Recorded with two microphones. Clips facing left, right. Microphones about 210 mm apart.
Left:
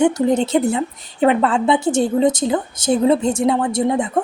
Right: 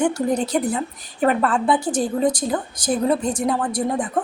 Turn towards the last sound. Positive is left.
turn(degrees=25)  # may be behind; listen again after turning